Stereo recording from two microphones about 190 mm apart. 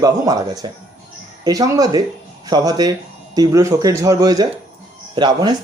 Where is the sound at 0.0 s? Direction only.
20° right (ahead or behind).